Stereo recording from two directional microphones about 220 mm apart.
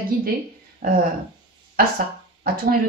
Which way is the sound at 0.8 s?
40° right (ahead or behind).